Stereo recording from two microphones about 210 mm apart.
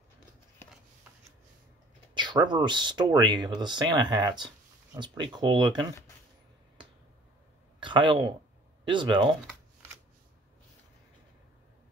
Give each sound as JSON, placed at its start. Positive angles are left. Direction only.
{"t": 2.1, "sound": "speech", "side_deg": -20}
{"t": 7.8, "sound": "speech", "side_deg": -25}